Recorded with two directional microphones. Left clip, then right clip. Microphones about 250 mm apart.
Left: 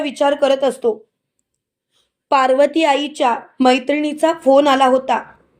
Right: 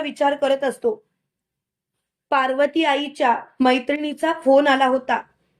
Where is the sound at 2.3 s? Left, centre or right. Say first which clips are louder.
Left 6 dB; centre.